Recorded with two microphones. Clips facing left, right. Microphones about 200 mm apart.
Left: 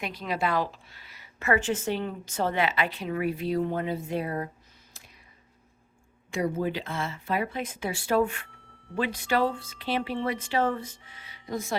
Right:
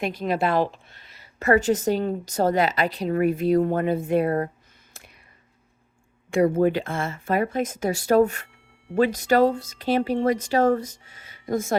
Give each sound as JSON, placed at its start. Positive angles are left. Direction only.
{"t": 0.0, "sound": "a woman's voice", "side_deg": -45}
{"t": 6.3, "sound": "a woman's voice", "side_deg": -55}